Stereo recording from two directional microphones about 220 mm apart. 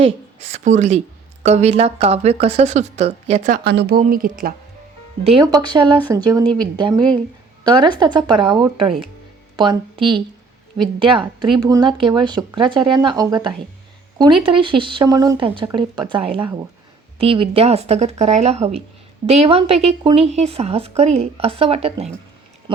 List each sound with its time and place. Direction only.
0.5 s speech: 35° right (ahead or behind)
5.2 s speech: 25° right (ahead or behind)